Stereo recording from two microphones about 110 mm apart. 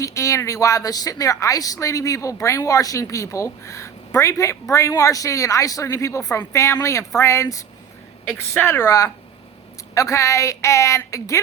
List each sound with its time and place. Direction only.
0.0 s a woman's voice: 30° left (ahead or behind)